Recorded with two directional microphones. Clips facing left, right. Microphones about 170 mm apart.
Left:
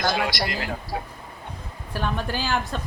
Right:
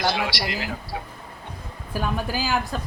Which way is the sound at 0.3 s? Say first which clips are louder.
Left 1 dB; 45° left (ahead or behind).